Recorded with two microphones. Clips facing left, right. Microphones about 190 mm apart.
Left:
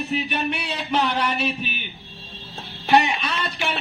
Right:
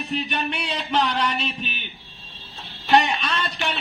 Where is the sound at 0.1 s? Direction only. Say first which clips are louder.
Even; 5° left (ahead or behind).